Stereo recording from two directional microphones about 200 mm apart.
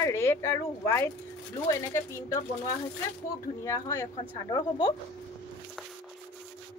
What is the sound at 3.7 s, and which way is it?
A woman's voice, 15° left (ahead or behind).